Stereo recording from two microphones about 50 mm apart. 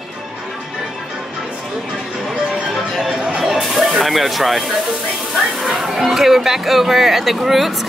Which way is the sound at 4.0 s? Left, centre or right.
Centre.